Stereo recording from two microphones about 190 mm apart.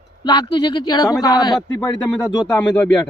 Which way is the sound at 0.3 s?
20° left (ahead or behind).